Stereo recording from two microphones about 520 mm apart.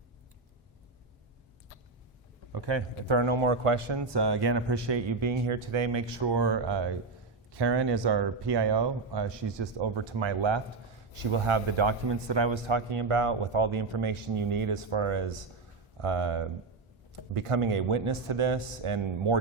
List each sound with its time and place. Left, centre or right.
2.5 s a sound: right
3.1 s speech: right
11.1 s a man's voice: right